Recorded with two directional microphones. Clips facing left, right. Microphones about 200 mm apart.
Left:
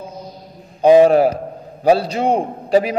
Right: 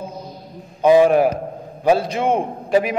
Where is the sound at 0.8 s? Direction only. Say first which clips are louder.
Left 3 dB; 30° left (ahead or behind).